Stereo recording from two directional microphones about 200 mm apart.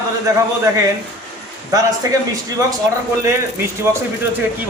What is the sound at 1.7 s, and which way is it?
Speech, 15° right (ahead or behind).